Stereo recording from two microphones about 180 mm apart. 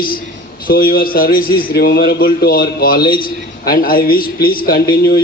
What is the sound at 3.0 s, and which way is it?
Speech, 25° left (ahead or behind).